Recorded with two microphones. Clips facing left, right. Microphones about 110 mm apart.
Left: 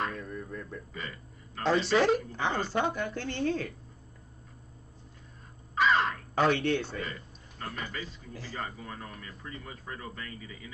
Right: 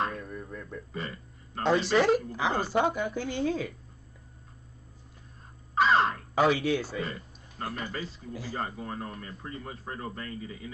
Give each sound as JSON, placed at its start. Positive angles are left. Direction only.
{"t": 0.2, "sound": "a sound", "side_deg": -5}
{"t": 0.9, "sound": "speech", "side_deg": -30}
{"t": 1.6, "sound": "a woman's voice", "side_deg": 0}
{"t": 5.8, "sound": "speech", "side_deg": -30}
{"t": 6.3, "sound": "speech", "side_deg": -5}
{"t": 7.0, "sound": "a sound", "side_deg": -35}
{"t": 7.7, "sound": "speech", "side_deg": -35}
{"t": 8.3, "sound": "a woman's voice", "side_deg": -10}
{"t": 8.5, "sound": "speech", "side_deg": -35}